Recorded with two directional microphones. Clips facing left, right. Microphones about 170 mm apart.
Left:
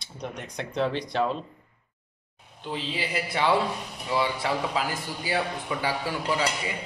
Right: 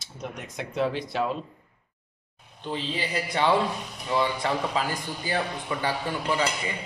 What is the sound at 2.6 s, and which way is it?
A man's voice, 5° left (ahead or behind).